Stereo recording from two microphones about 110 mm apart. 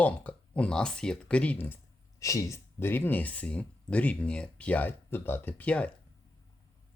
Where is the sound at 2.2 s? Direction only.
30° left (ahead or behind); by 5.9 s 10° left (ahead or behind).